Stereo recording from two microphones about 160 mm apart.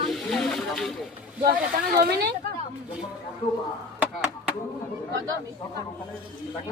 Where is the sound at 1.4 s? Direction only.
70° right (ahead or behind).